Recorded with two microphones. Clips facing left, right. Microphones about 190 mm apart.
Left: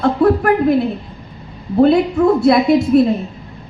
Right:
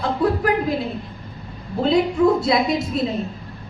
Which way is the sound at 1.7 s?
55° left (ahead or behind).